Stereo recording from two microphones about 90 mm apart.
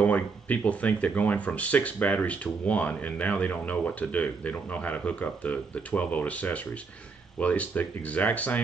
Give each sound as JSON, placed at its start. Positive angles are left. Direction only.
{"t": 0.0, "sound": "speech", "side_deg": 15}